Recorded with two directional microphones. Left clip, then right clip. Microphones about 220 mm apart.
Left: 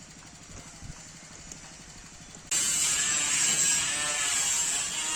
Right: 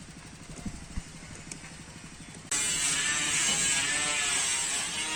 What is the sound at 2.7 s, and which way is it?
Electric shaver, 45° left (ahead or behind).